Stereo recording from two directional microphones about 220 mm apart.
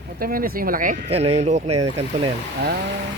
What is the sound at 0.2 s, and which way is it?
Speech, 40° right (ahead or behind).